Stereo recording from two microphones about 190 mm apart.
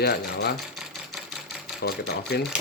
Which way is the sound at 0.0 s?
60° left (ahead or behind).